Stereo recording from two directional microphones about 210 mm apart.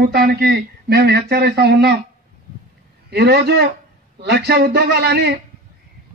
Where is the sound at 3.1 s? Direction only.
50° right (ahead or behind).